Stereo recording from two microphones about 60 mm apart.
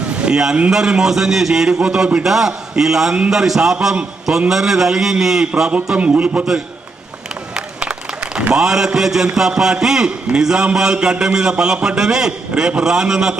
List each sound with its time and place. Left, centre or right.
0.1 s a man's voice: centre
7.5 s a man's voice: centre